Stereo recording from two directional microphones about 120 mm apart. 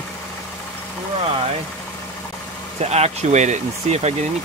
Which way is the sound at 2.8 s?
65° right (ahead or behind).